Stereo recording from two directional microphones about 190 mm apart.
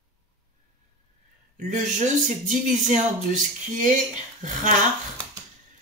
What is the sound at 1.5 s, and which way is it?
Speech, 40° right (ahead or behind).